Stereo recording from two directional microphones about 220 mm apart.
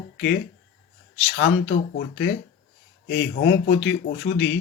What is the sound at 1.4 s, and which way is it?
Speech, 55° left (ahead or behind).